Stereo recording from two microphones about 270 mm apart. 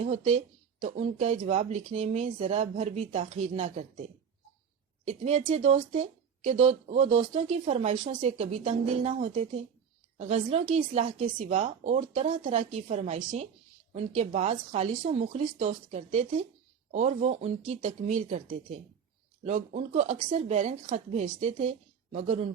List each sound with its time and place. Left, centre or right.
0.0 s a woman's voice: right
5.0 s a woman's voice: right
19.5 s a woman's voice: right